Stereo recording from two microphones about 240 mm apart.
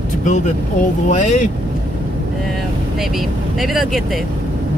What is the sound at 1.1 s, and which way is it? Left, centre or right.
Speech, left.